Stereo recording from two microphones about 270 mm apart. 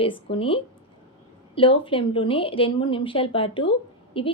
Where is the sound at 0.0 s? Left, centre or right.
Centre.